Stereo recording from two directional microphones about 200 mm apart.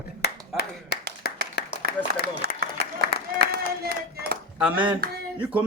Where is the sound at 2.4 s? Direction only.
55° right (ahead or behind).